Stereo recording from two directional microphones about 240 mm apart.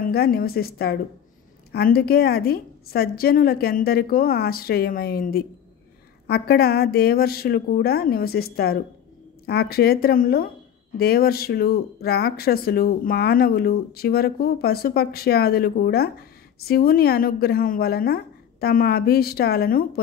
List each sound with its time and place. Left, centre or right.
0.0 s speech: left